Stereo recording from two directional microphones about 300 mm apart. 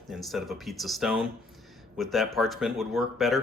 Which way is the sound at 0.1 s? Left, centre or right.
Centre.